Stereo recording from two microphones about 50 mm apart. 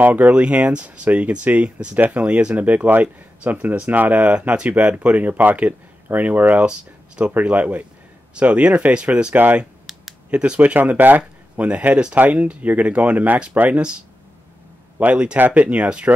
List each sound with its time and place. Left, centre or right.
0.0 s speech: right
0.3 s speech: right
9.9 s computer keyboard: centre
10.3 s speech: centre
10.6 s speech: right
11.6 s speech: right
15.0 s speech: right
15.6 s speech: right